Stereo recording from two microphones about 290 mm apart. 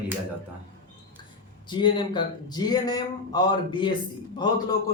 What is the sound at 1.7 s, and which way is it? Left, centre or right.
Speech, centre.